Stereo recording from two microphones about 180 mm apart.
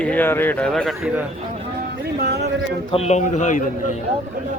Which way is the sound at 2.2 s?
65° right (ahead or behind).